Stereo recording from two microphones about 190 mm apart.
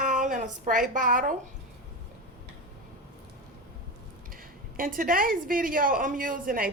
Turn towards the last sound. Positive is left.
turn(degrees=-45)  # may be behind; listen again after turning